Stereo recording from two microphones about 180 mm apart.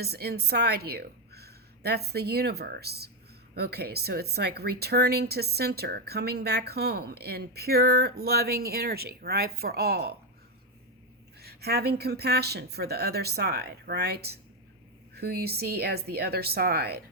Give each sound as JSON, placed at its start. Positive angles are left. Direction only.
{"t": 0.0, "sound": "a woman's voice", "side_deg": -60}
{"t": 11.3, "sound": "speech", "side_deg": -60}